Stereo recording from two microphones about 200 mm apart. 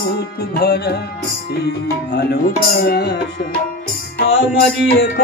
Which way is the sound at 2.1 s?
55° left (ahead or behind).